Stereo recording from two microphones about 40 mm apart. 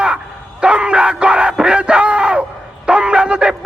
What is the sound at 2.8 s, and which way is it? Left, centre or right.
Shofar, right.